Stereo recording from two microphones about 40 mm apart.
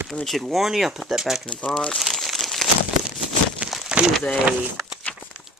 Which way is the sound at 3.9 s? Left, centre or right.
Right.